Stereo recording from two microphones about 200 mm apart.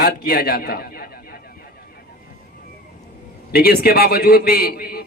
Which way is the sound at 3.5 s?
50° left (ahead or behind).